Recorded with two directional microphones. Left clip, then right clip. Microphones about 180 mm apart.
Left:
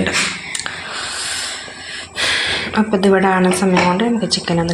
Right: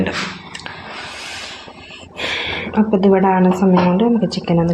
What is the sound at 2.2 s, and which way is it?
Speech, 15° right (ahead or behind).